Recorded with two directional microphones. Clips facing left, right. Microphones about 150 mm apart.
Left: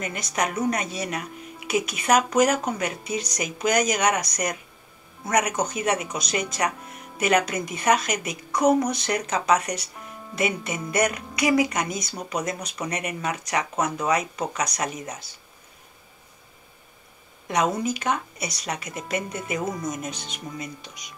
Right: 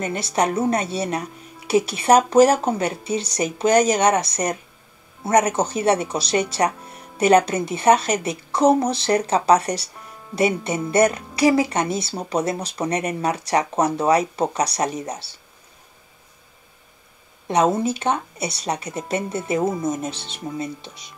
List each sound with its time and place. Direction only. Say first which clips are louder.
0.0 s speech: right 6 dB; 30° right (ahead or behind)
17.5 s speech: right 5 dB; 30° right (ahead or behind)